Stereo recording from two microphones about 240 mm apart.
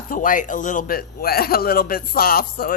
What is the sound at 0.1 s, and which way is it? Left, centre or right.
Speech, left.